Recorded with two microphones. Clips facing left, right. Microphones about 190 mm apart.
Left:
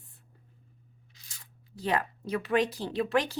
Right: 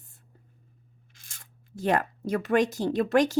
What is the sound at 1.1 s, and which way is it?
Speech, 50° right (ahead or behind).